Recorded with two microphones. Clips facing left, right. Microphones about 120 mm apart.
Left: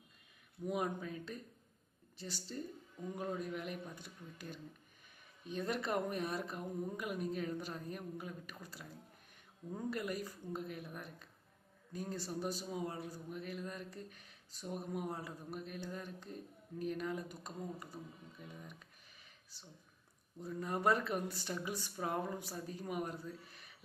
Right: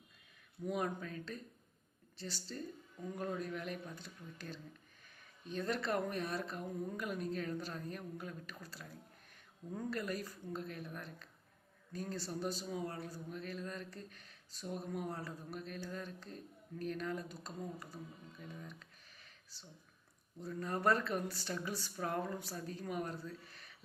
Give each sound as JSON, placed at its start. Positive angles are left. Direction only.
{"t": 0.6, "sound": "a man's voice", "side_deg": 10}